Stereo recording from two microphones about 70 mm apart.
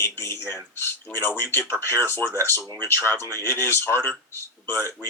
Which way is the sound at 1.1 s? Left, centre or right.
Left.